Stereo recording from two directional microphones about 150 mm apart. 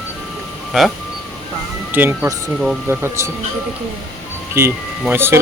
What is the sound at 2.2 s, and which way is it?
Speech, centre (ahead or behind).